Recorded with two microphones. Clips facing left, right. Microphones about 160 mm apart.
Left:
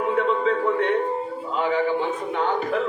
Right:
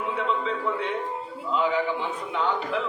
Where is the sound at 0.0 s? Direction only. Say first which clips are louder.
Left 6 dB; 50° left (ahead or behind).